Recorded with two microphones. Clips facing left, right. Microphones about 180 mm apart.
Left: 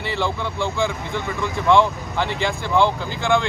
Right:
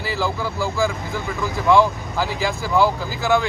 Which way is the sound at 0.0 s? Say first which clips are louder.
Even; centre (ahead or behind).